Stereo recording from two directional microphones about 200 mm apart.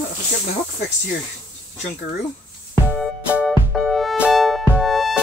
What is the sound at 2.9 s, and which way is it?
Music, 5° right (ahead or behind).